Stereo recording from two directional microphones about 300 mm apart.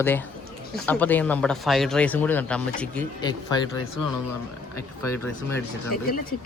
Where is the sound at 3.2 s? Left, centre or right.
Centre.